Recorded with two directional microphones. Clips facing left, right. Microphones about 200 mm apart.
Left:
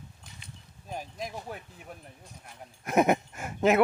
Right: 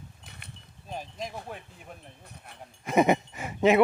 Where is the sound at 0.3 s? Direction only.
65° right (ahead or behind).